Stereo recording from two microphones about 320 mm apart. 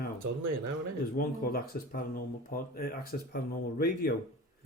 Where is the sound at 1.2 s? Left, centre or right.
Left.